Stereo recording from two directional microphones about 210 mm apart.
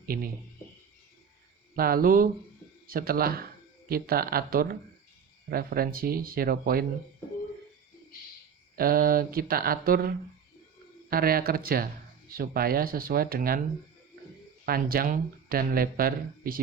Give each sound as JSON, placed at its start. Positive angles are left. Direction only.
{"t": 0.0, "sound": "speech", "side_deg": -45}
{"t": 1.7, "sound": "speech", "side_deg": -45}
{"t": 8.8, "sound": "speech", "side_deg": -45}
{"t": 14.6, "sound": "speech", "side_deg": -45}